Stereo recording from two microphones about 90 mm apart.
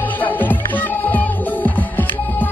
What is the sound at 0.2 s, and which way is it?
Music, 20° left (ahead or behind).